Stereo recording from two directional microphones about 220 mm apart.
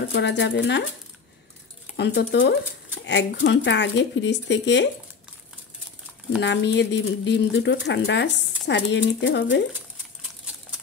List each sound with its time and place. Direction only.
0.1 s speech: 55° left (ahead or behind)
2.0 s speech: 55° left (ahead or behind)
6.4 s speech: 55° left (ahead or behind)